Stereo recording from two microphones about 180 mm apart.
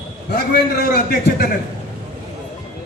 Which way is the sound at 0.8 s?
60° left (ahead or behind).